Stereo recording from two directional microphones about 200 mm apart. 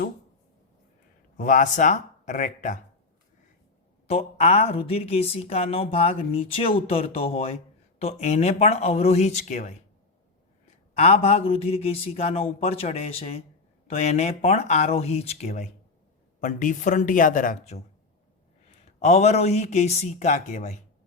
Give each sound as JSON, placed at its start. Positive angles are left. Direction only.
{"t": 1.4, "sound": "speech", "side_deg": 40}
{"t": 4.0, "sound": "a woman's voice", "side_deg": 30}
{"t": 10.9, "sound": "speech", "side_deg": 30}